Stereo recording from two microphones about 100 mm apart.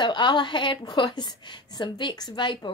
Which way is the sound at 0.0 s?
50° left (ahead or behind).